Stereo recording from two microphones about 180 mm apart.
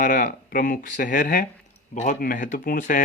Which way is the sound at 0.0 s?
50° left (ahead or behind).